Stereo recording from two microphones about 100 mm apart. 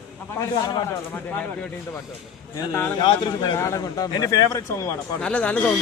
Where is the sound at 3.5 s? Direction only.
35° left (ahead or behind).